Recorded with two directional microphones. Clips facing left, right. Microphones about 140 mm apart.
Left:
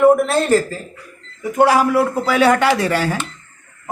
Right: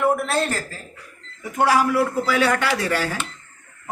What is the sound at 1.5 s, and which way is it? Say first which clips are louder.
Speech: left 5 dB; 25° left (ahead or behind).